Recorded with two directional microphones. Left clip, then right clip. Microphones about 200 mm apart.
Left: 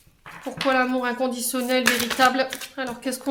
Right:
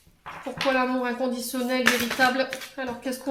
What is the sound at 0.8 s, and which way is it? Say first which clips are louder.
Speech: left 3 dB; 35° left (ahead or behind).